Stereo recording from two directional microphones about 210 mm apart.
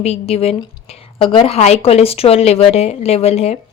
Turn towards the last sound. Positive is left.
turn(degrees=30)  # may be behind; listen again after turning